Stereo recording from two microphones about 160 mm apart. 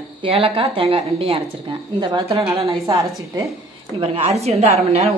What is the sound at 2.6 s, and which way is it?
Speech, 20° right (ahead or behind).